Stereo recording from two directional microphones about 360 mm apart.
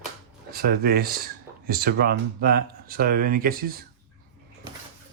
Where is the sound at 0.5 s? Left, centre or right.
Right.